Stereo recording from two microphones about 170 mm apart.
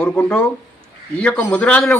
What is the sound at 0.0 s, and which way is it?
A man's voice, 5° left (ahead or behind).